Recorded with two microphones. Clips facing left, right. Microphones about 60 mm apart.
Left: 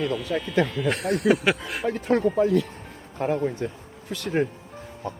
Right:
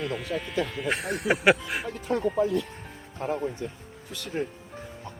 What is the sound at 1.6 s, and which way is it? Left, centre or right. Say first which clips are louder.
Speech: left 3 dB; centre.